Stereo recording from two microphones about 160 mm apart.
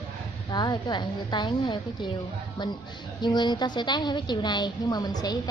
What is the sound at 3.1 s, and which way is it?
A woman's voice, 25° left (ahead or behind).